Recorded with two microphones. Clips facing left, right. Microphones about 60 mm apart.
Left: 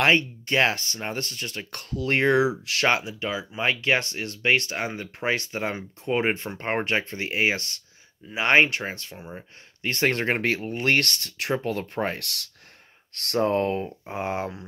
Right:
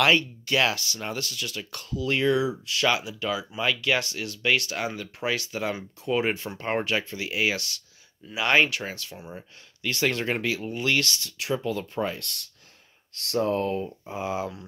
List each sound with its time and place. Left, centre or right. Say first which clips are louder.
0.0 s speech: left 1 dB; left
2.9 s speech: left 1 dB; left
13.1 s speech: left 2 dB; left